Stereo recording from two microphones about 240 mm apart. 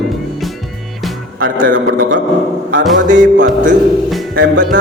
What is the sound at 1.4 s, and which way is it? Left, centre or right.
Speech, right.